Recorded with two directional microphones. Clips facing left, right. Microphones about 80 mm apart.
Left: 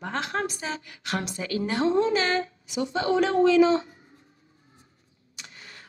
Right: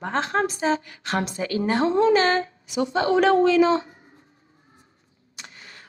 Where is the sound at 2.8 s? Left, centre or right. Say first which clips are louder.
Right 3 dB; right.